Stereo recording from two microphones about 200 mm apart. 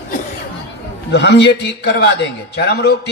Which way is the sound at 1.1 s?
60° left (ahead or behind).